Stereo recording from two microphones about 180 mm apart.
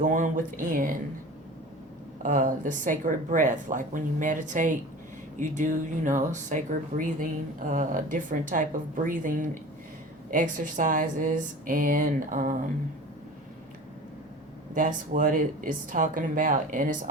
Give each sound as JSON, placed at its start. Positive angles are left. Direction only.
{"t": 0.0, "sound": "speech", "side_deg": -50}
{"t": 2.2, "sound": "speech", "side_deg": -50}
{"t": 14.8, "sound": "speech", "side_deg": -50}